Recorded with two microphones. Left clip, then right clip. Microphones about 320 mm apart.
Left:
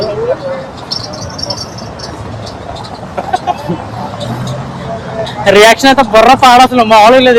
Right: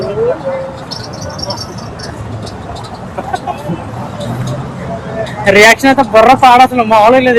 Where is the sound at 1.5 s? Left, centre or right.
Centre.